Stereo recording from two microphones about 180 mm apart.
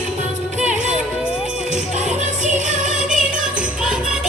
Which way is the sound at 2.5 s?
40° right (ahead or behind).